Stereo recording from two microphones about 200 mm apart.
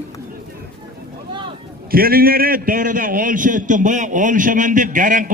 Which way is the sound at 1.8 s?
45° right (ahead or behind).